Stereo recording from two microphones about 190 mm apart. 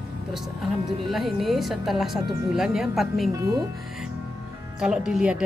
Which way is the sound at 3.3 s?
15° right (ahead or behind).